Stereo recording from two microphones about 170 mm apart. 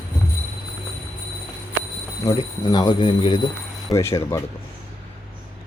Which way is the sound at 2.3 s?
15° left (ahead or behind).